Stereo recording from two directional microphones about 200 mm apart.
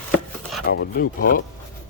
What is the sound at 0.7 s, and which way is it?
Rub, 50° left (ahead or behind).